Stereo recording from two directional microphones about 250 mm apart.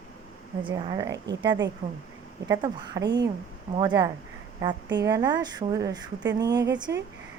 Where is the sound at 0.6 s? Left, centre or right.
Centre.